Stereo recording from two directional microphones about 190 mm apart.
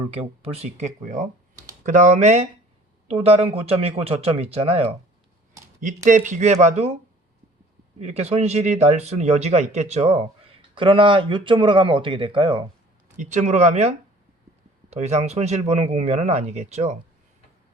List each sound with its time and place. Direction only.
0.2 s speech: 35° right (ahead or behind)
6.1 s speech: 40° right (ahead or behind)
8.0 s speech: 35° right (ahead or behind)
13.3 s speech: 40° right (ahead or behind)